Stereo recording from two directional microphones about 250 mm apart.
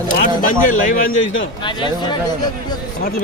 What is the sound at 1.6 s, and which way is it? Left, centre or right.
Speech, centre.